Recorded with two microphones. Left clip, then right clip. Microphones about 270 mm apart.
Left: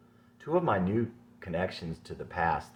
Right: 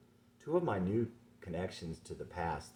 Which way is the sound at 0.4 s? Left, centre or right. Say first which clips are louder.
Left 6 dB; centre.